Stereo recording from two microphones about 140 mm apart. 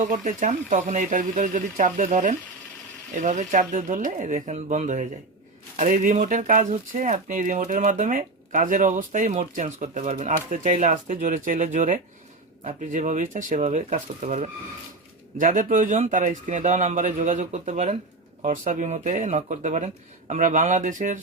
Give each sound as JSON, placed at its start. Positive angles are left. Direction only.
{"t": 0.0, "sound": "speech", "side_deg": -65}
{"t": 15.4, "sound": "speech", "side_deg": -65}